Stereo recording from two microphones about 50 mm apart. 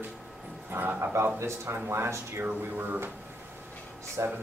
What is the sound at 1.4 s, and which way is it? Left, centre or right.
Speech, right.